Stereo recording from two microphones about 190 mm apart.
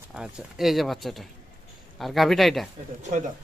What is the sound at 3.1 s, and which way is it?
Speech, 40° right (ahead or behind).